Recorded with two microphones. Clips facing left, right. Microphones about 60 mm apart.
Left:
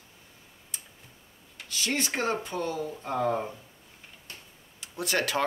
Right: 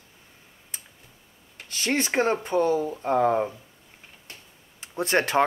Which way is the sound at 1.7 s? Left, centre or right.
Right.